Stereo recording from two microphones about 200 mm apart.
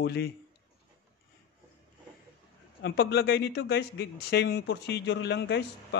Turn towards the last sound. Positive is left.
turn(degrees=60)  # may be behind; listen again after turning